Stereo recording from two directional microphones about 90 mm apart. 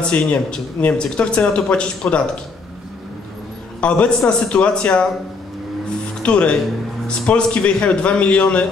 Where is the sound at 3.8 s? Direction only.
10° left (ahead or behind).